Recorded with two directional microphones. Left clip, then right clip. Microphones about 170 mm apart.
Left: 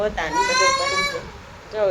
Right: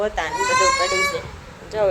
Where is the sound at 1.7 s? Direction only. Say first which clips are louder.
Right 1 dB; 15° right (ahead or behind).